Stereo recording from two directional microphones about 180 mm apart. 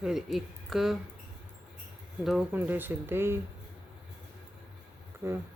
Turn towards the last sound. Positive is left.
turn(degrees=-10)  # may be behind; listen again after turning